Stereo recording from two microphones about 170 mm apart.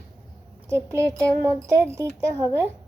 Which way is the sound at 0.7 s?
15° right (ahead or behind).